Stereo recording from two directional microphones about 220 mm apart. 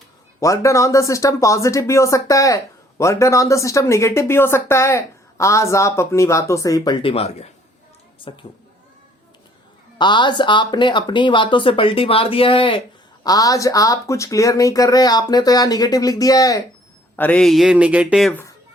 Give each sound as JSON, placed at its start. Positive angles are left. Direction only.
{"t": 0.3, "sound": "speech", "side_deg": 15}
{"t": 10.0, "sound": "speech", "side_deg": 20}